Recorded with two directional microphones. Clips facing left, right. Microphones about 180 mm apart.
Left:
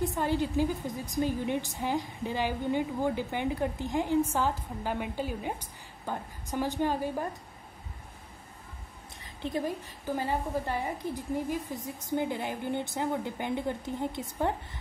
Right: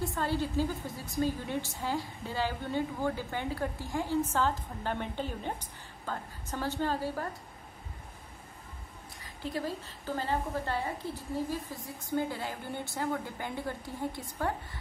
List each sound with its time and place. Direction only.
0.0 s a woman's voice: 15° left (ahead or behind)
9.2 s a woman's voice: 20° left (ahead or behind)